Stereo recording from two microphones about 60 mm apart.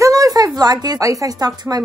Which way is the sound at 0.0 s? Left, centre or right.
Right.